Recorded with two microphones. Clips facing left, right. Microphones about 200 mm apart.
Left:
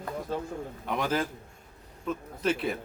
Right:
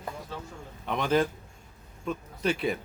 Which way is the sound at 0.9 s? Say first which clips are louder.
Right 4 dB; 5° left (ahead or behind).